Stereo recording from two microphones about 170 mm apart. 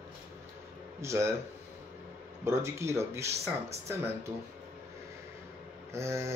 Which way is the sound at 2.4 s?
15° right (ahead or behind).